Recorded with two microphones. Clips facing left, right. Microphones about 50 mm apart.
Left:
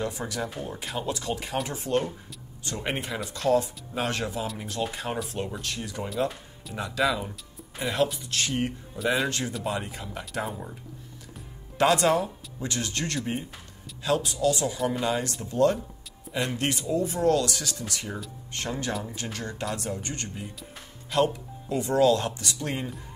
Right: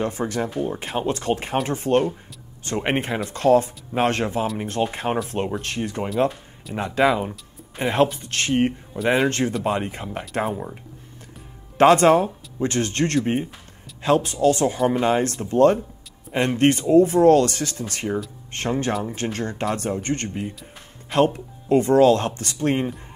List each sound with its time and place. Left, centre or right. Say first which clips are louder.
0.0 s speech: right 6 dB; right
11.8 s speech: right 8 dB; right